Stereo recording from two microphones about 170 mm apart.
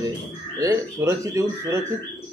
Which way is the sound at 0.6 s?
20° right (ahead or behind).